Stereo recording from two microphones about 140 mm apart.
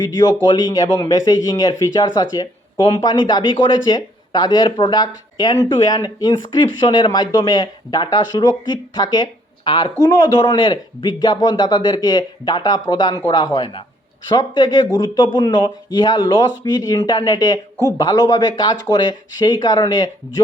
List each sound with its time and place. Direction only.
0.0 s a man's voice: 30° left (ahead or behind)